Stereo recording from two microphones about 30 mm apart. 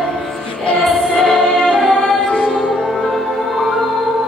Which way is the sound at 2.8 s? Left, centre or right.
Centre.